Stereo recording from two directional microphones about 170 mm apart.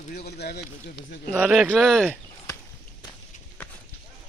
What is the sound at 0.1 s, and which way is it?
Speech, 70° left (ahead or behind).